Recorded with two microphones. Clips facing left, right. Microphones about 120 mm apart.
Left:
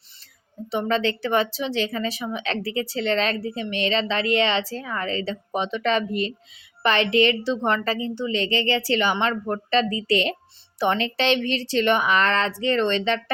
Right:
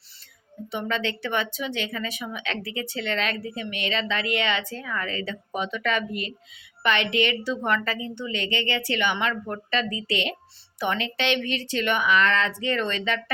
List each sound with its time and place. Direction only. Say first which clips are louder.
0.7 s speech: left 5 dB; 35° left (ahead or behind)